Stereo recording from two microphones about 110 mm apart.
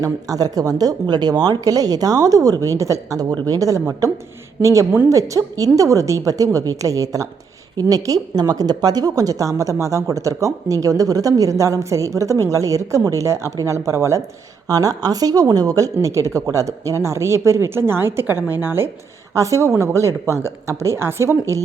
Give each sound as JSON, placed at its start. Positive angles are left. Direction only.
{"t": 0.0, "sound": "a woman's voice", "side_deg": -35}